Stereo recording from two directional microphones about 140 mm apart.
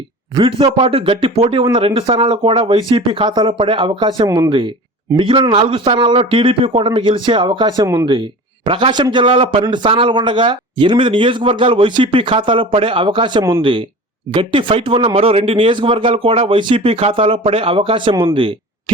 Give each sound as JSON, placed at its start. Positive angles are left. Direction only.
{"t": 0.3, "sound": "speech", "side_deg": -40}